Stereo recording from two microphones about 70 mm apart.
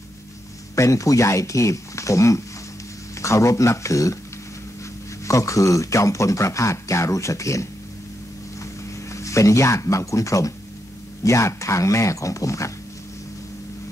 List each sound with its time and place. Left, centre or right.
0.7 s speech: left
5.2 s speech: left
9.1 s speech: left